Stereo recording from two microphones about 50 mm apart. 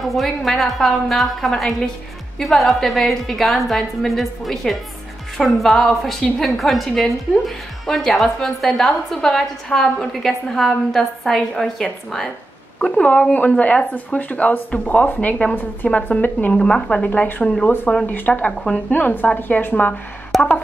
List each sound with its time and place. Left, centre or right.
0.0 s a woman's voice: centre
12.9 s a woman's voice: left
16.5 s speech: centre
17.0 s a woman's voice: left
20.3 s a sound: centre